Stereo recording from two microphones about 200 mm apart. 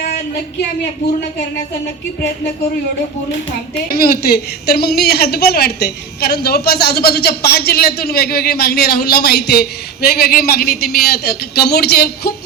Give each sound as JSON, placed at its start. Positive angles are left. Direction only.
{"t": 3.9, "sound": "a woman's voice", "side_deg": 50}